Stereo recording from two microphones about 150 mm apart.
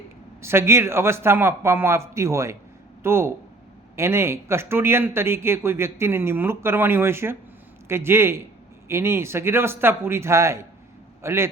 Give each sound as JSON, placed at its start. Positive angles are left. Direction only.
{"t": 0.4, "sound": "speech", "side_deg": -15}